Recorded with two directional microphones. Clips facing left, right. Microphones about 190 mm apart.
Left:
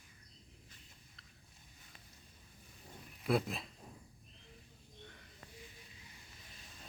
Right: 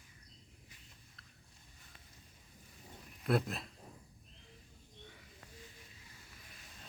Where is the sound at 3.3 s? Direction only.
Centre (ahead or behind).